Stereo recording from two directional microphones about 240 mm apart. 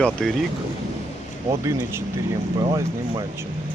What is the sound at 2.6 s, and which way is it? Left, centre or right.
Speech, centre.